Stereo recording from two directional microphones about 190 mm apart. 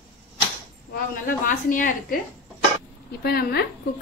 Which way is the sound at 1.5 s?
45° left (ahead or behind).